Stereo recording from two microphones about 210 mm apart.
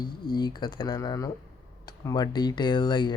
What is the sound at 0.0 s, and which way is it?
Speech, 20° left (ahead or behind).